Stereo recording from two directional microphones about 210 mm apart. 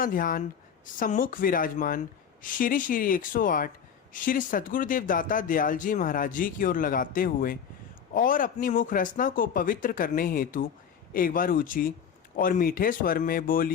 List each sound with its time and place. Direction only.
0.0 s speech: 40° left (ahead or behind)